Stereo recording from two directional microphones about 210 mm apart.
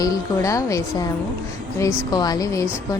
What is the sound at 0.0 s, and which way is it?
A woman's voice, 15° left (ahead or behind).